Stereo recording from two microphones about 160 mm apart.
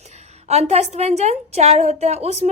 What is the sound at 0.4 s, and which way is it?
A woman's voice, 45° right (ahead or behind).